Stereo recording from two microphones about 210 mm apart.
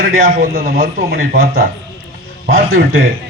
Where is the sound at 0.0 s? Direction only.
40° right (ahead or behind).